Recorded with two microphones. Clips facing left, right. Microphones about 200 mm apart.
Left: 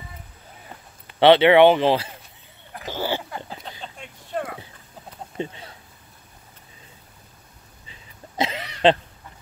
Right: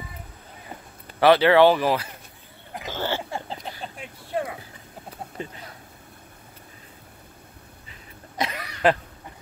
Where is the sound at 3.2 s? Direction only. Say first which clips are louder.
Right 2 dB; 25° right (ahead or behind).